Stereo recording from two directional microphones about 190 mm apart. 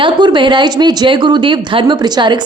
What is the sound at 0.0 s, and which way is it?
Speech, 25° right (ahead or behind).